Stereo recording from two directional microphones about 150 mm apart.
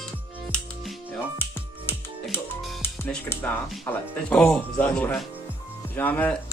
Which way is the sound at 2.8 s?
15° left (ahead or behind).